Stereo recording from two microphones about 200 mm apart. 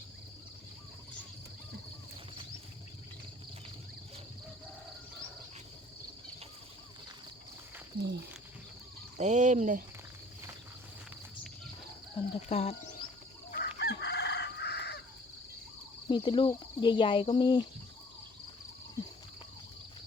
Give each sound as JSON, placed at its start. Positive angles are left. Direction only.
{"t": 7.9, "sound": "speech", "side_deg": -55}
{"t": 9.1, "sound": "speech", "side_deg": -35}
{"t": 12.5, "sound": "speech", "side_deg": 30}
{"t": 13.5, "sound": "chicken", "side_deg": 55}
{"t": 16.0, "sound": "speech", "side_deg": 25}